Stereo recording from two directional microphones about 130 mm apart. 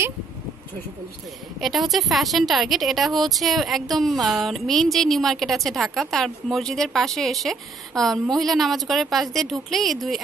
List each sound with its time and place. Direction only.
1.6 s speech: centre (ahead or behind)